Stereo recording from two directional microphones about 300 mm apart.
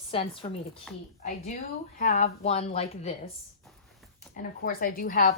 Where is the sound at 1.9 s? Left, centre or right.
Left.